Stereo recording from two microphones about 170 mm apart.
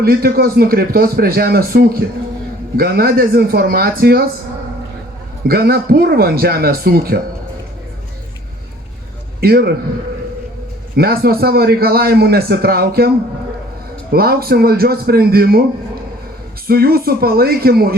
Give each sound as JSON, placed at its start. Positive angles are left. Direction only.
{"t": 0.0, "sound": "a man's voice", "side_deg": -65}
{"t": 5.5, "sound": "a man's voice", "side_deg": -60}
{"t": 9.4, "sound": "a man's voice", "side_deg": -65}
{"t": 10.9, "sound": "a man's voice", "side_deg": -65}
{"t": 14.1, "sound": "a man's voice", "side_deg": -65}
{"t": 16.6, "sound": "a man's voice", "side_deg": -65}